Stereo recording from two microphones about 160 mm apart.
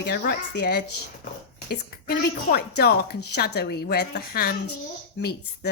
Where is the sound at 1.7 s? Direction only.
75° left (ahead or behind).